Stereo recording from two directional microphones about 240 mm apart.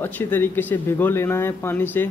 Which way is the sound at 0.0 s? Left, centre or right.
Centre.